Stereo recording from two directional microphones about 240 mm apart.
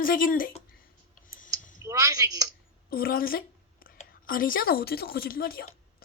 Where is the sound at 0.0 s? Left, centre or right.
Left.